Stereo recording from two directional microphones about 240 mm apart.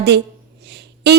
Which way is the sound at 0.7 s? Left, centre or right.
Right.